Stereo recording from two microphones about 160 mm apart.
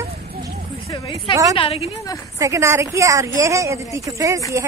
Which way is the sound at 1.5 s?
40° left (ahead or behind).